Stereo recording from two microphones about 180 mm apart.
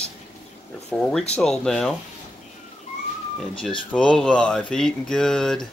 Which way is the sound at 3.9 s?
5° left (ahead or behind).